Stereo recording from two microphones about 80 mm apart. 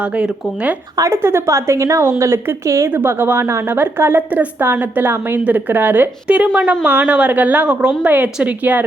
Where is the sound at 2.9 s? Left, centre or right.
Right.